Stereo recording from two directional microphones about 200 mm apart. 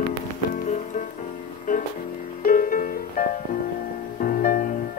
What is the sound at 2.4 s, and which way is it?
Music, 45° left (ahead or behind).